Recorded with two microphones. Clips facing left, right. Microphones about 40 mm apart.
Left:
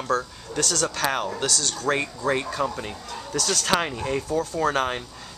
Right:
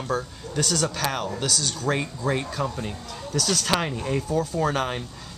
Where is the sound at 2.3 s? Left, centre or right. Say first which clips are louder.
Left 2 dB; centre.